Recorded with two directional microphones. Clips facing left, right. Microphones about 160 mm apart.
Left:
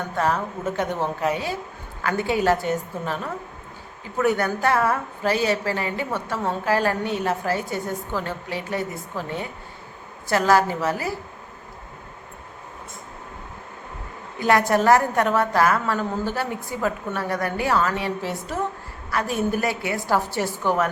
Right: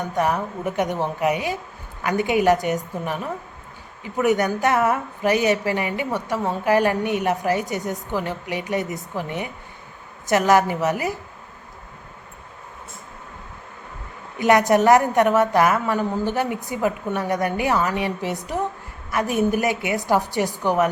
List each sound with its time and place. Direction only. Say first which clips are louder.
0.0 s a woman's voice: right 1 dB; 15° right (ahead or behind)
4.2 s a woman's voice: right 2 dB; 15° right (ahead or behind)
14.3 s a woman's voice: right 3 dB; 20° right (ahead or behind)